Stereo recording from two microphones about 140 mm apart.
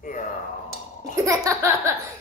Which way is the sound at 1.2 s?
25° right (ahead or behind).